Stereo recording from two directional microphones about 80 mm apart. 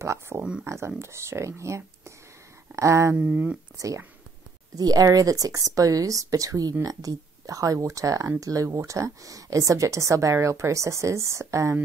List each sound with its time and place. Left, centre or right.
0.0 s speech: right
0.4 s speech: centre
0.7 s speech: right
3.2 s speech: centre
3.7 s speech: right